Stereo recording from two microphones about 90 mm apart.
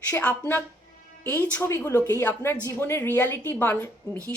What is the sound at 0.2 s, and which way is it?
A woman's voice, 20° left (ahead or behind).